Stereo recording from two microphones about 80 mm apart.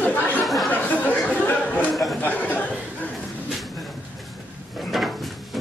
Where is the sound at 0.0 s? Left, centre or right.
Centre.